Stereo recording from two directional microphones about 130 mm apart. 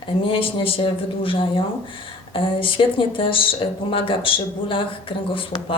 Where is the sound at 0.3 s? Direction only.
45° left (ahead or behind).